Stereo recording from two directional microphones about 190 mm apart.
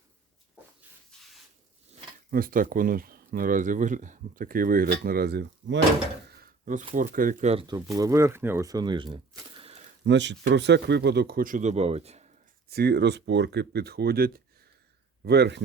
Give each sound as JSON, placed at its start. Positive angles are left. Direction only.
{"t": 2.3, "sound": "speech", "side_deg": -50}
{"t": 6.2, "sound": "speech", "side_deg": -50}
{"t": 7.9, "sound": "speech", "side_deg": -15}
{"t": 9.6, "sound": "a sound", "side_deg": -30}
{"t": 10.1, "sound": "speech", "side_deg": -65}
{"t": 12.6, "sound": "speech", "side_deg": -55}